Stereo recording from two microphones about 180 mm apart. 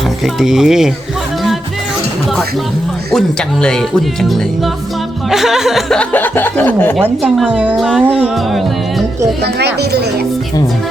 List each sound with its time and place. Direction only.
0.3 s speech: 5° right (ahead or behind)
3.1 s speech: 5° left (ahead or behind)
7.0 s speech: centre (ahead or behind)